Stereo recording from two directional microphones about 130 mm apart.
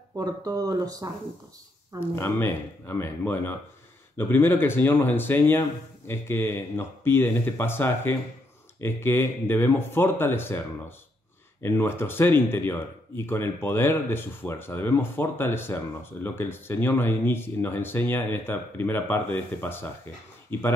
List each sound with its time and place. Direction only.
0.2 s speech: 30° right (ahead or behind)
2.0 s speech: 20° left (ahead or behind)
11.6 s speech: 20° left (ahead or behind)